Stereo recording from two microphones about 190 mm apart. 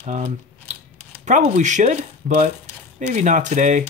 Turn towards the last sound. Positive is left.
turn(degrees=-40)  # may be behind; listen again after turning